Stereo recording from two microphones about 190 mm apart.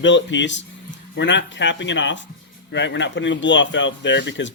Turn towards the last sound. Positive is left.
turn(degrees=70)  # may be behind; listen again after turning